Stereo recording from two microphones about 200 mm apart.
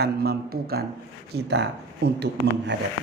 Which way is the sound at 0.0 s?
50° right (ahead or behind).